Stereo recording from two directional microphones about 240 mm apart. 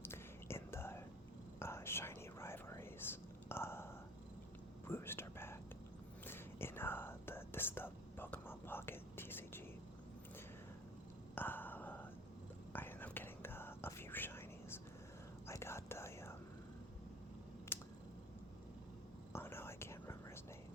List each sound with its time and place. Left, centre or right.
0.0 s whispering: centre
4.9 s whispering: centre
11.3 s a sound: centre
12.7 s whispering: centre
17.7 s a sound: centre
19.3 s whispering: centre